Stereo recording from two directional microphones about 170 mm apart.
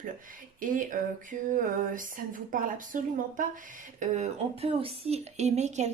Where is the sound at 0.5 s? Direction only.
50° right (ahead or behind).